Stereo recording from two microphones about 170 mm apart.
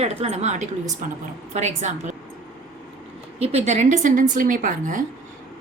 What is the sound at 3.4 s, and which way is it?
A woman's voice, 35° right (ahead or behind).